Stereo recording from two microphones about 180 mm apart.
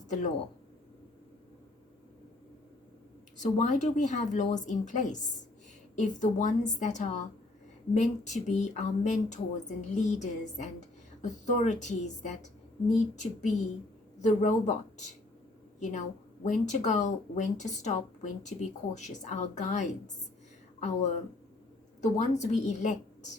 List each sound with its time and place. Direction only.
3.3 s a woman's voice: 40° left (ahead or behind)
15.8 s speech: 40° left (ahead or behind)